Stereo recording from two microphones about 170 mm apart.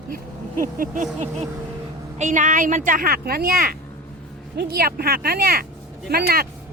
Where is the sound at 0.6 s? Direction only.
50° right (ahead or behind).